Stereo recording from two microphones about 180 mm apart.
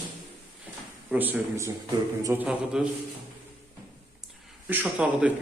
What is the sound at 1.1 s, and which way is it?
A man's voice, 10° right (ahead or behind).